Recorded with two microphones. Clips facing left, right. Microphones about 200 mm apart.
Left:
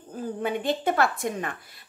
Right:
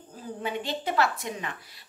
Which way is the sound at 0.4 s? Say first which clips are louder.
Left 4 dB; 50° left (ahead or behind).